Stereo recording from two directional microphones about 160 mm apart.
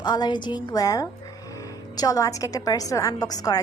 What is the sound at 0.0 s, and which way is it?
A woman's voice, 25° left (ahead or behind).